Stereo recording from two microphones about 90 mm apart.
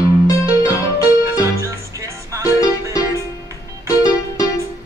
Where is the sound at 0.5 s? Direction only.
35° left (ahead or behind).